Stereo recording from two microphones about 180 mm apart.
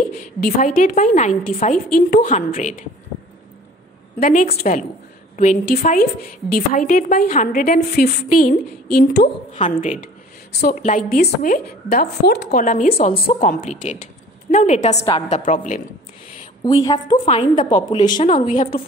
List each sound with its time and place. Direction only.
0.2 s a woman's voice: 50° left (ahead or behind)
4.2 s a woman's voice: 45° left (ahead or behind); by 9.3 s 60° left (ahead or behind)
9.5 s a woman's voice: 40° left (ahead or behind)
10.5 s a woman's voice: 65° left (ahead or behind)
10.8 s a woman's voice: 45° left (ahead or behind); by 12.6 s 70° left (ahead or behind)
12.6 s a woman's voice: 45° left (ahead or behind)
16.8 s a woman's voice: 25° left (ahead or behind)
18.2 s a woman's voice: 35° left (ahead or behind)